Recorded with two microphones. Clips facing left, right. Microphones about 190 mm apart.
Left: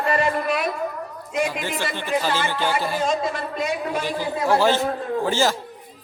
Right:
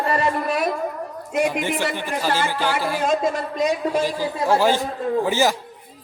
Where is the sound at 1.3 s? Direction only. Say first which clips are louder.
Right 3 dB; 60° right (ahead or behind).